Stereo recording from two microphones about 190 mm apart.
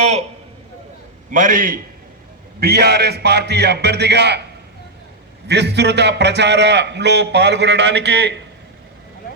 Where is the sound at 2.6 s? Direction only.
55° right (ahead or behind).